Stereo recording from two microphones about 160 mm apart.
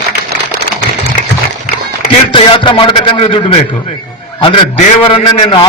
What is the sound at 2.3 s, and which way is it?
A man's voice, 30° left (ahead or behind).